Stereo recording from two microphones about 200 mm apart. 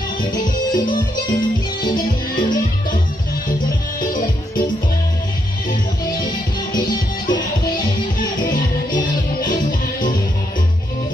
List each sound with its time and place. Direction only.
0.7 s music: 20° left (ahead or behind)
1.9 s music: 45° left (ahead or behind)
4.0 s music: 45° left (ahead or behind)
6.9 s music: 20° left (ahead or behind)
8.4 s music: 40° left (ahead or behind)